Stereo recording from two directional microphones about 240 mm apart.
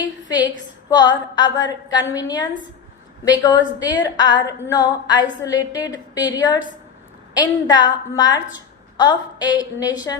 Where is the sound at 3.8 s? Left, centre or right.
Centre.